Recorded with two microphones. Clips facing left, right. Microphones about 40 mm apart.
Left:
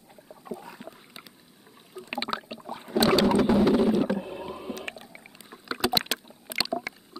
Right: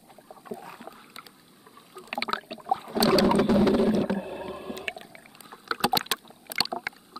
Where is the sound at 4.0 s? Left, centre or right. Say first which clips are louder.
Left 1 dB; centre.